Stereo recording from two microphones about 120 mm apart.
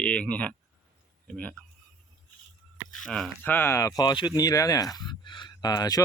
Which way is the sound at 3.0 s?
5° left (ahead or behind).